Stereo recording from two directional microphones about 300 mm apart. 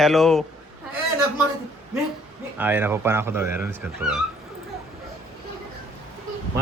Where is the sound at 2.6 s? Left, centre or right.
Centre.